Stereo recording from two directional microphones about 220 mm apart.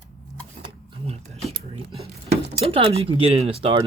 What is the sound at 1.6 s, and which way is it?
Speech, 25° right (ahead or behind).